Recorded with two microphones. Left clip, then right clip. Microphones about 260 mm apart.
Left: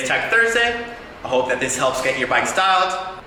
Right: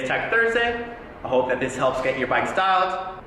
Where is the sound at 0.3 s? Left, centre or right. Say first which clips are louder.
Left 4 dB; centre.